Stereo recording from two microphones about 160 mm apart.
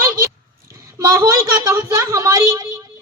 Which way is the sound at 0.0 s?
15° right (ahead or behind).